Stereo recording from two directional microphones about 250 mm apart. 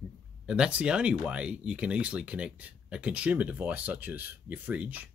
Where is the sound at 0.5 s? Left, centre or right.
Centre.